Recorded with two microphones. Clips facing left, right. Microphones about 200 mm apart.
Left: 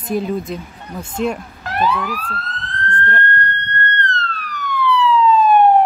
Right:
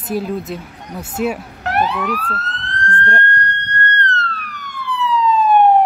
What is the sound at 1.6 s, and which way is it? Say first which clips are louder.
Speech: right 1 dB; 70° right (ahead or behind).